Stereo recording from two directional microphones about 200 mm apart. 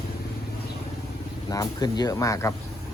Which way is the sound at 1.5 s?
20° left (ahead or behind).